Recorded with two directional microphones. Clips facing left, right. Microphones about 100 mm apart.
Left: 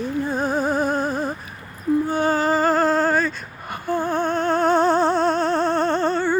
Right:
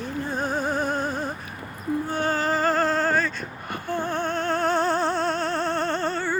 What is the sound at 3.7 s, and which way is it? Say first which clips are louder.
Music: left 5 dB; 10° left (ahead or behind).